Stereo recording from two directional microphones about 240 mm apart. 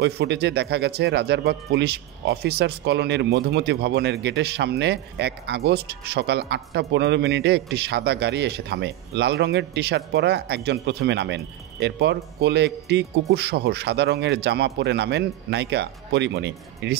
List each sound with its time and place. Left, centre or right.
0.0 s speech: right